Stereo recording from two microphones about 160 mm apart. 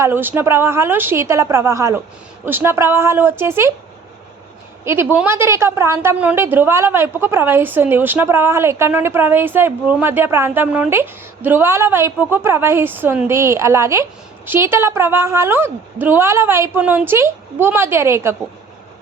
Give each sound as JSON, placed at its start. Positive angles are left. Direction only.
{"t": 0.0, "sound": "a woman's voice", "side_deg": -15}
{"t": 4.9, "sound": "a woman's voice", "side_deg": -15}